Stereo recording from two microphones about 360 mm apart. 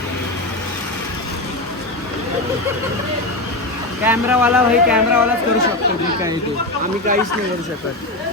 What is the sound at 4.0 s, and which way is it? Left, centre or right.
Speech, centre.